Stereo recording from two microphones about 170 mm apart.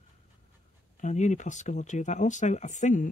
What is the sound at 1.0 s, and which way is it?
Speech, 45° left (ahead or behind).